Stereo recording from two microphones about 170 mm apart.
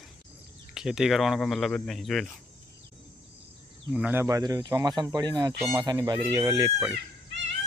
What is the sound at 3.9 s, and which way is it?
Speech, 10° right (ahead or behind).